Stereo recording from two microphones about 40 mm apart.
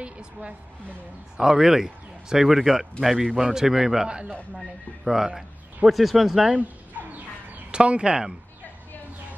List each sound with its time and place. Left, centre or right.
0.0 s a woman's voice: right
1.4 s speech: centre
5.9 s speech: centre
6.5 s dog: right
7.7 s a woman's voice: right